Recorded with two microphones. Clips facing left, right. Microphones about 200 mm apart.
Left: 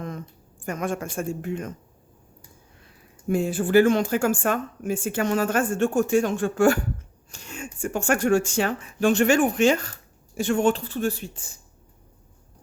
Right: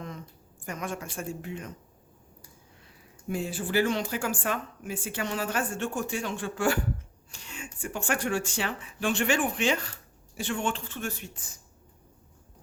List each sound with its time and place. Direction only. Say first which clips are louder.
0.6 s speech: left 7 dB; 50° left (ahead or behind)
3.2 s speech: left 8 dB; 50° left (ahead or behind); by 11.4 s 35° left (ahead or behind)